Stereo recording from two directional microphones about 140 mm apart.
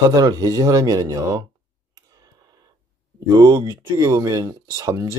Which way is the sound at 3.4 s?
25° right (ahead or behind).